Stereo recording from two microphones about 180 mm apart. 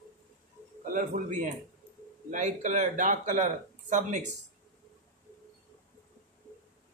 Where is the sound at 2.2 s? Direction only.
45° right (ahead or behind).